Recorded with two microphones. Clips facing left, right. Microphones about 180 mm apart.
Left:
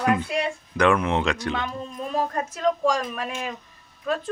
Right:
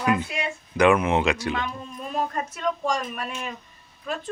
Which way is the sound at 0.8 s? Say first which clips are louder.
Right 2 dB; 10° right (ahead or behind).